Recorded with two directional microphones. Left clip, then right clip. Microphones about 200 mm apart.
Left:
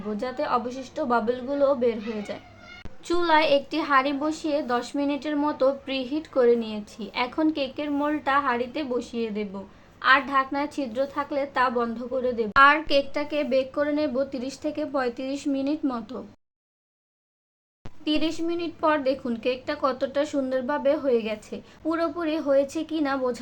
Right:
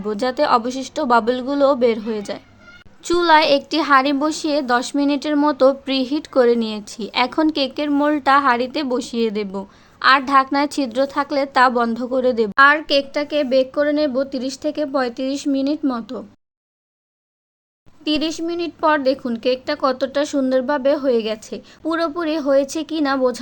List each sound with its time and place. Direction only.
0.1 s a woman's voice: 45° right (ahead or behind)
12.5 s a woman's voice: 30° right (ahead or behind)
18.0 s a woman's voice: 30° right (ahead or behind)